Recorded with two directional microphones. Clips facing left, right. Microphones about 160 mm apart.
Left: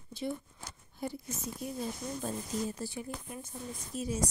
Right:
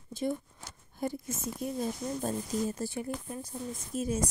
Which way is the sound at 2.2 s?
45° right (ahead or behind).